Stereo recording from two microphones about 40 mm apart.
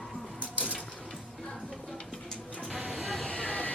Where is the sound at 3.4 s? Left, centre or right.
Left.